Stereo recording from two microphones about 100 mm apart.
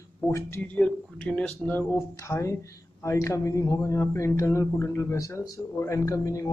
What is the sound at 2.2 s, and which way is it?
Speech, 30° left (ahead or behind).